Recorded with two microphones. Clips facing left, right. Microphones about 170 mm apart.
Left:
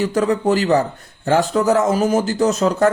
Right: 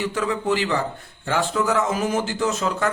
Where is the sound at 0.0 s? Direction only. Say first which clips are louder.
Left 7 dB; 40° left (ahead or behind).